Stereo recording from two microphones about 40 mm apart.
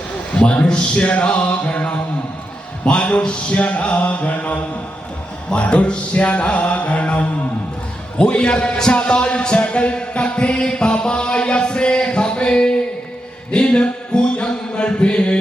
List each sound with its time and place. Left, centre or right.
0.3 s mantra: left
0.7 s a man's voice: left
1.0 s mantra: left
8.2 s a man's voice: left
8.9 s music: left
13.5 s mantra: left